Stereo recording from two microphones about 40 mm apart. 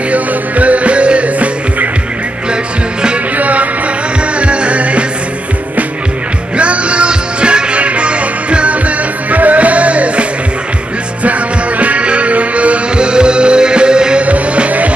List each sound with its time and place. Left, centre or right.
0.1 s music: right
3.3 s music: right
6.5 s music: right
11.2 s music: right
14.2 s music: right